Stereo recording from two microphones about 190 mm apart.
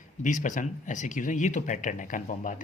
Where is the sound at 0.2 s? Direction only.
40° left (ahead or behind).